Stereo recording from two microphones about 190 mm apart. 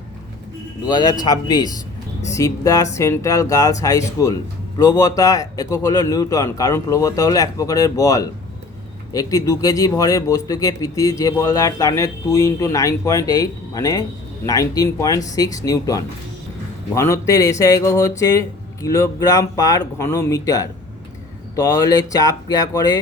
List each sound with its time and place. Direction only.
0.9 s speech: 20° left (ahead or behind)